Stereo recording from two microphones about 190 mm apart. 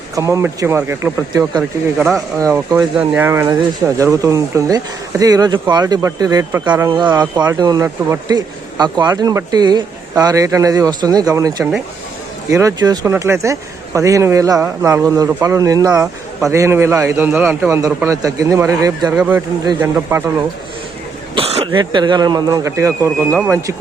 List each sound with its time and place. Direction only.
0.2 s speech: 15° right (ahead or behind)
21.3 s speech: 30° right (ahead or behind); by 23.7 s 10° right (ahead or behind)